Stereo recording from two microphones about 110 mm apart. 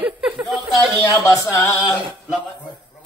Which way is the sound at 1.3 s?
30° left (ahead or behind).